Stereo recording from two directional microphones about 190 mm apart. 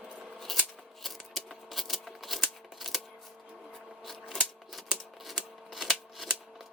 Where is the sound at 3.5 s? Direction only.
Centre (ahead or behind).